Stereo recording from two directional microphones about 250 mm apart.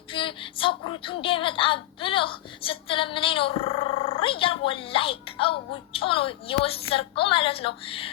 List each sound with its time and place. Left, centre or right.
0.1 s a woman's voice: left